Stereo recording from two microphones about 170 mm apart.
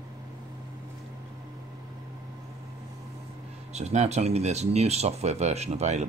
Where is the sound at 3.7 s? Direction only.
40° right (ahead or behind).